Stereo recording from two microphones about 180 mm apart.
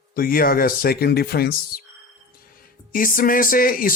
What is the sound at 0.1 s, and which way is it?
Speech, 55° left (ahead or behind).